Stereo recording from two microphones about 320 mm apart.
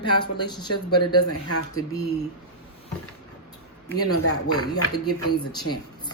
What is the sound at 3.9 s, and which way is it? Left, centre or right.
Speech, left.